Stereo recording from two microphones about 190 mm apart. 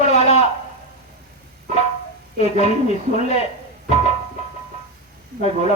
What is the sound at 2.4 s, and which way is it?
Speech, 35° left (ahead or behind).